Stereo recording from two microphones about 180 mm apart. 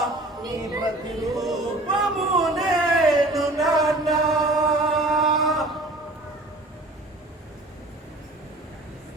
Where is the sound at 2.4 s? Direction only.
Centre (ahead or behind).